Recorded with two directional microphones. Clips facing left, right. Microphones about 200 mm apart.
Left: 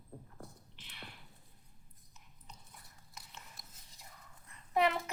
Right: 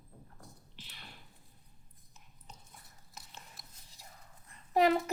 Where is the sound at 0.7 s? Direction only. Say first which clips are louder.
Left 1 dB; 35° right (ahead or behind).